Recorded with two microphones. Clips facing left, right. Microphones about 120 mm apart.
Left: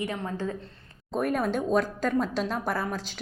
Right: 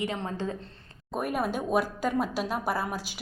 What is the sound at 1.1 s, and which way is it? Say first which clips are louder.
A woman's voice: left 3 dB; 5° right (ahead or behind).